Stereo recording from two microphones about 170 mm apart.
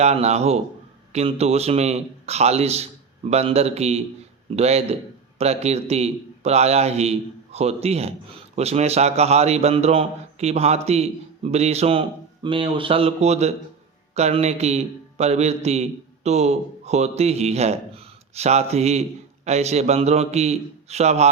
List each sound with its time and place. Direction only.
0.0 s a man's voice: 40° right (ahead or behind)